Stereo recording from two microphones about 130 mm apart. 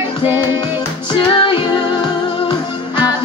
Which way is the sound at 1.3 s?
40° left (ahead or behind).